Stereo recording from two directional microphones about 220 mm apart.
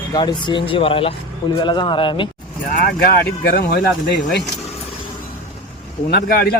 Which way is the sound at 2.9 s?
40° left (ahead or behind).